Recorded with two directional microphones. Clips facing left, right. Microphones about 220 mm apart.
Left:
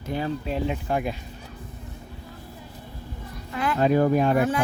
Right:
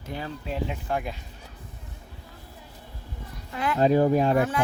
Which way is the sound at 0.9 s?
10° left (ahead or behind).